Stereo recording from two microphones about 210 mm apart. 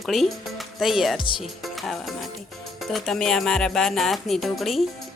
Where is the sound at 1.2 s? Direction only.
25° left (ahead or behind).